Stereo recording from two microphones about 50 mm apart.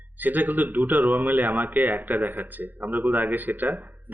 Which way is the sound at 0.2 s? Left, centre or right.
Right.